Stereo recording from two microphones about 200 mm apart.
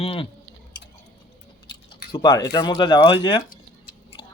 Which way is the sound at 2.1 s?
20° left (ahead or behind).